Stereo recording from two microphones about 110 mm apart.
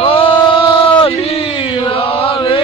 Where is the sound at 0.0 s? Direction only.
55° left (ahead or behind).